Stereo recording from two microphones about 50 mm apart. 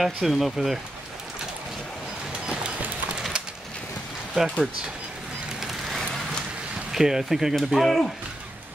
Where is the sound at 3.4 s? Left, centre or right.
Right.